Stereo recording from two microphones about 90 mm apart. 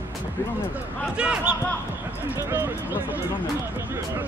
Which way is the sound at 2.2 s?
25° right (ahead or behind).